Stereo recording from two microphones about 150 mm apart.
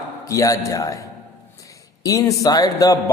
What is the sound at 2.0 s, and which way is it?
Speech, 20° left (ahead or behind).